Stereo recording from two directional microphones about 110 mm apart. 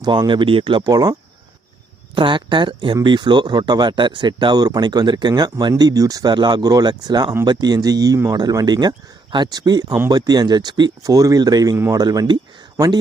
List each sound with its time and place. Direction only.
0.0 s speech: 40° right (ahead or behind)
0.9 s speech: 35° right (ahead or behind)
2.1 s speech: 45° right (ahead or behind)